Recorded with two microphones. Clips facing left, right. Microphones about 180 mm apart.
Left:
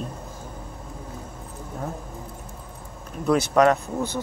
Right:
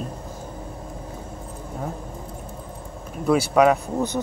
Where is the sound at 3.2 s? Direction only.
5° right (ahead or behind).